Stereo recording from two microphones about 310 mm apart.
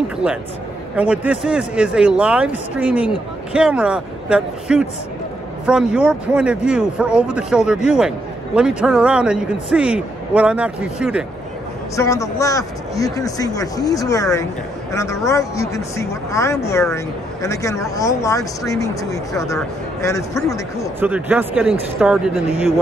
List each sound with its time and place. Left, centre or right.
0.9 s a man's voice: centre
11.9 s a man's voice: centre
21.0 s a man's voice: centre